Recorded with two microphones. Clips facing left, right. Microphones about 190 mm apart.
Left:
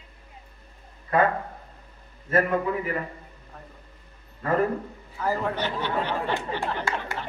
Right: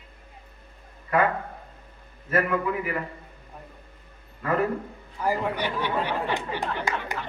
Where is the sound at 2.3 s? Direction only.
35° left (ahead or behind).